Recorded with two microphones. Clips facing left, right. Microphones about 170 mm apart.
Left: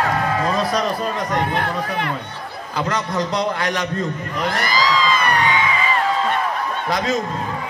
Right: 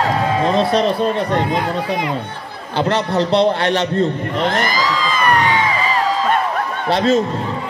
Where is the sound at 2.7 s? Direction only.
30° right (ahead or behind).